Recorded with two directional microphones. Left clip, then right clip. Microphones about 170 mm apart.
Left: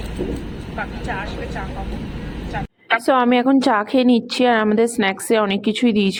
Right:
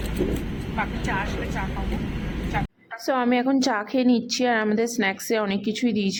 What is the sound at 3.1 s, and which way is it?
A woman's voice, 20° left (ahead or behind).